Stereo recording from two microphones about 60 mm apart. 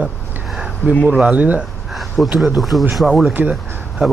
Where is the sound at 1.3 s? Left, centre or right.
Right.